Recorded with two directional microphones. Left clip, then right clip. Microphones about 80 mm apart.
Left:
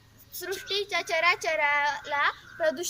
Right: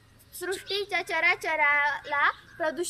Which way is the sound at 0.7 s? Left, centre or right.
Right.